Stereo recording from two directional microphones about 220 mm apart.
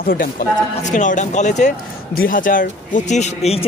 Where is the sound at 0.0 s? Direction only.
40° left (ahead or behind).